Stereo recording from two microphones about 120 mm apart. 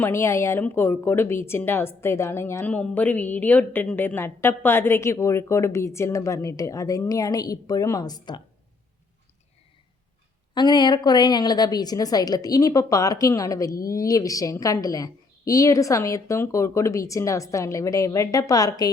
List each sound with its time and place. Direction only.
0.0 s a woman's voice: 20° left (ahead or behind)
10.5 s a woman's voice: 35° left (ahead or behind)